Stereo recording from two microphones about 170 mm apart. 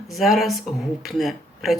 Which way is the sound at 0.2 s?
Centre (ahead or behind).